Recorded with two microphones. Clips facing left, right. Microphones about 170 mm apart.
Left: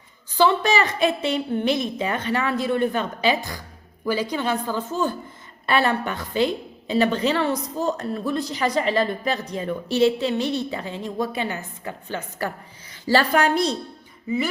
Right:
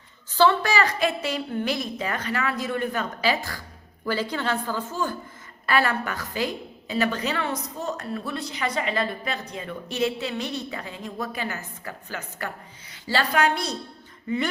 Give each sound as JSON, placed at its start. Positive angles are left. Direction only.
{"t": 0.3, "sound": "a woman's voice", "side_deg": 20}
{"t": 13.3, "sound": "a woman's voice", "side_deg": 40}
{"t": 14.3, "sound": "speech", "side_deg": 5}